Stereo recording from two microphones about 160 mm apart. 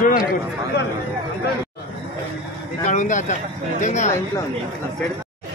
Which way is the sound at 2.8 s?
50° left (ahead or behind).